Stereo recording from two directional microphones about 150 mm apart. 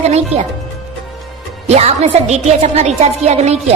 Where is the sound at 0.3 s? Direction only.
45° right (ahead or behind).